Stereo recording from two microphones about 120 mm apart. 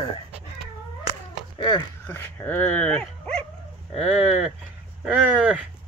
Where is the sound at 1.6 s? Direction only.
45° left (ahead or behind).